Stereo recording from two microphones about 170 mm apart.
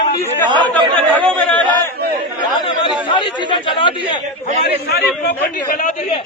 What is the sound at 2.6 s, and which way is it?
Speech, 30° left (ahead or behind).